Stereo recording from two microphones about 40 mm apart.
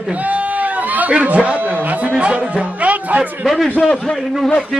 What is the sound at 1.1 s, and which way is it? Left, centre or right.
Speech, right.